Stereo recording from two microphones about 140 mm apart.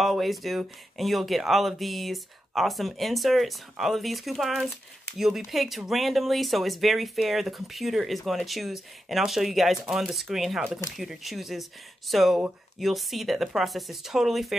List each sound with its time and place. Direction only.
0.0 s speech: centre (ahead or behind)